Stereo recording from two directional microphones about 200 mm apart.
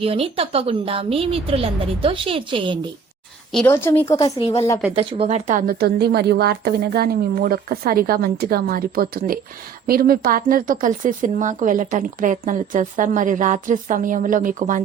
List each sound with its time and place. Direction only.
0.0 s a woman's voice: 30° right (ahead or behind)
3.5 s a woman's voice: 10° left (ahead or behind)
4.9 s a woman's voice: 30° right (ahead or behind)
5.5 s a woman's voice: 45° right (ahead or behind)